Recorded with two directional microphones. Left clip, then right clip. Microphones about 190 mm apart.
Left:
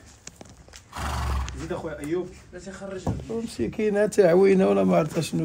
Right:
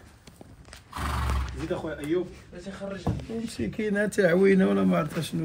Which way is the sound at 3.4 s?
30° left (ahead or behind).